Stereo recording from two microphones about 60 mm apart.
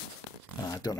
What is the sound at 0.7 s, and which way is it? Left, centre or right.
Speech, left.